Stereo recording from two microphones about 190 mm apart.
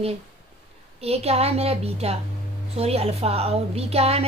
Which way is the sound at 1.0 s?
30° right (ahead or behind).